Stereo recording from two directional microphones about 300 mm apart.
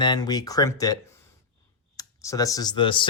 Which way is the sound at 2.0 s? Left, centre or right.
Centre.